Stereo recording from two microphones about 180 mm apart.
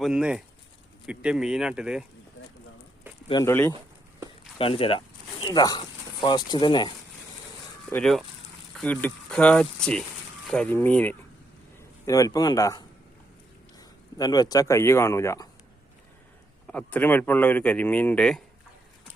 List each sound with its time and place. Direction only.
0.0 s speech: 5° right (ahead or behind)
3.4 s speech: 10° left (ahead or behind)
4.5 s speech: 30° left (ahead or behind)
7.9 s a man's voice: 5° left (ahead or behind)
16.6 s speech: 10° left (ahead or behind)